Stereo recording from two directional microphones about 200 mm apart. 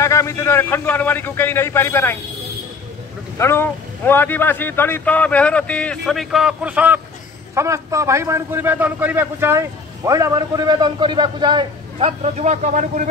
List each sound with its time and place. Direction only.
0.0 s speech: 15° left (ahead or behind)
3.3 s a man's voice: 10° left (ahead or behind); by 13.1 s 40° right (ahead or behind)